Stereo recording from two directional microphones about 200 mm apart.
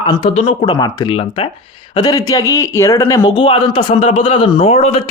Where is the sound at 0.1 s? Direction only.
25° left (ahead or behind).